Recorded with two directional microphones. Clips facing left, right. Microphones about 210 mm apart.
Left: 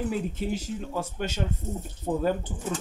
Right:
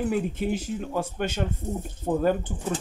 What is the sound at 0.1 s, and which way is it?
Speech, 55° right (ahead or behind).